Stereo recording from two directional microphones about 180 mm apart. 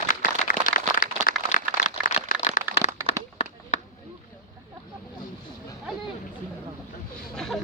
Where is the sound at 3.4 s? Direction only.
35° left (ahead or behind).